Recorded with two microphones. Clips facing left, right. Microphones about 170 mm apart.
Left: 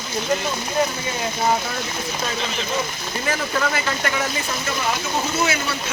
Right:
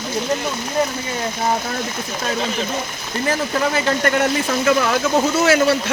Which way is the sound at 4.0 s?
50° right (ahead or behind).